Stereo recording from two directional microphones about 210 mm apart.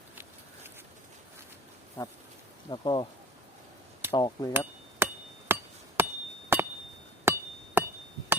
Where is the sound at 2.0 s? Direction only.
20° left (ahead or behind).